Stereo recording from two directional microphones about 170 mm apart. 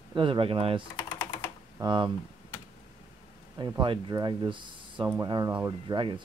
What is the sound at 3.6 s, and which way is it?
Speech, 25° right (ahead or behind).